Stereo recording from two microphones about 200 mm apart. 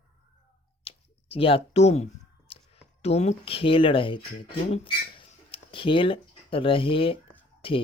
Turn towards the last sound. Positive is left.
turn(degrees=25)  # may be behind; listen again after turning